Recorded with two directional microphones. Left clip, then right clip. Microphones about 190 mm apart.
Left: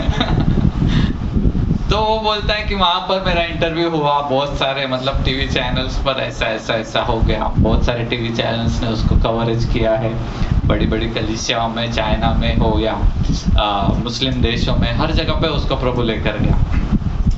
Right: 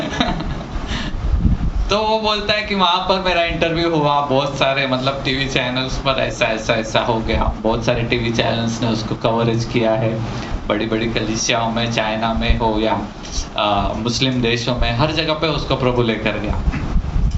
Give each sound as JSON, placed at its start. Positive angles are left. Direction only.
{"t": 1.9, "sound": "a man's voice", "side_deg": -55}